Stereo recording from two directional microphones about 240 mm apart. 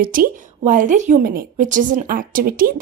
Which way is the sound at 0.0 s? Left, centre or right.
Right.